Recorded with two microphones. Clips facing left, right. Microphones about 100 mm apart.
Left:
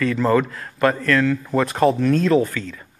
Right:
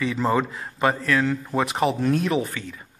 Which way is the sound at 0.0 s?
15° right (ahead or behind).